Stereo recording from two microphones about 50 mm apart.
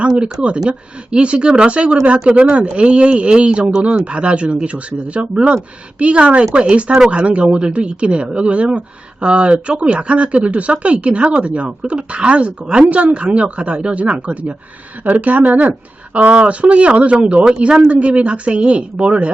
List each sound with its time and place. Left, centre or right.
0.2 s speech: right